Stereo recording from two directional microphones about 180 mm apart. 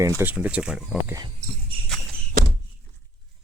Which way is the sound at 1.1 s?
25° right (ahead or behind).